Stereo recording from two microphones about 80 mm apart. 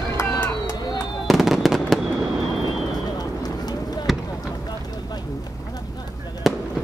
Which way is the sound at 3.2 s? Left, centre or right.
Left.